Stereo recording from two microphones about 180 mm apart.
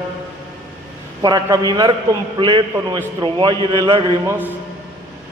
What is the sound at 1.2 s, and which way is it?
A man's voice, 20° right (ahead or behind).